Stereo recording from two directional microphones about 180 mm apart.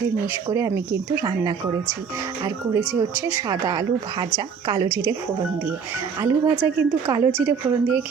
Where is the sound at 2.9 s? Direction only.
10° right (ahead or behind).